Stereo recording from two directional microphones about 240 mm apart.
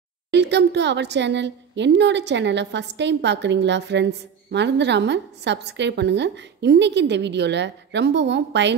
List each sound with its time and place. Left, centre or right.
0.3 s a woman's voice: right